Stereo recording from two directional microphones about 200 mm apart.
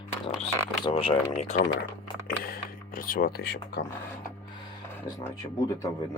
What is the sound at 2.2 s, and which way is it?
Speech, 45° left (ahead or behind).